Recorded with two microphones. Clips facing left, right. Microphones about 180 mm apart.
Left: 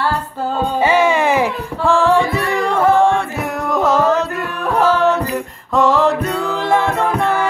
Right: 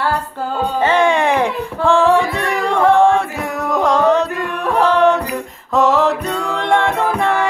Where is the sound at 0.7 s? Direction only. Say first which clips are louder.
Even; 10° left (ahead or behind).